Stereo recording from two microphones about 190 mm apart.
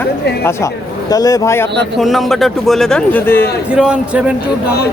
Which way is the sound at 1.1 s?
20° left (ahead or behind).